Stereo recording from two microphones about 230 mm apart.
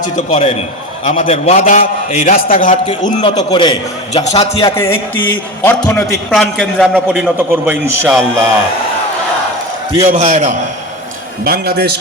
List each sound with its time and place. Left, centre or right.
0.3 s a man's voice: left
3.2 s a man's voice: centre
4.7 s music: centre
5.6 s a man's voice: centre
10.1 s a man's voice: right
11.4 s a man's voice: right